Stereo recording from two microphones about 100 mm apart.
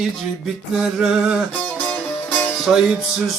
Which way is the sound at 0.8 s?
5° right (ahead or behind).